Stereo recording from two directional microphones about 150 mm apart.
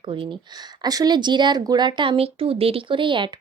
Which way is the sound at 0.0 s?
35° right (ahead or behind).